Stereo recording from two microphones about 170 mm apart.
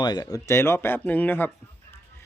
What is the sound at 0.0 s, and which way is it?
Speech, 25° left (ahead or behind).